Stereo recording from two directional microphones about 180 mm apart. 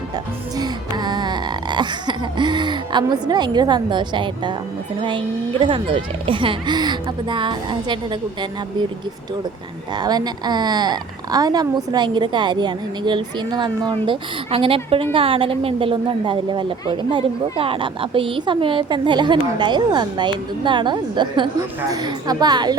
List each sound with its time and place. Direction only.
0.5 s a sound: 20° right (ahead or behind)
5.0 s speech: 30° right (ahead or behind)
9.9 s speech: 20° right (ahead or behind)